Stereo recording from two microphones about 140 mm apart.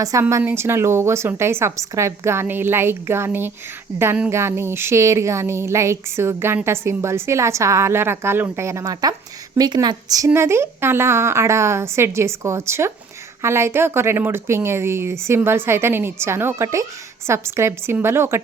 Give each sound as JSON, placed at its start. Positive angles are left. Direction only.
{"t": 0.0, "sound": "a woman's voice", "side_deg": -20}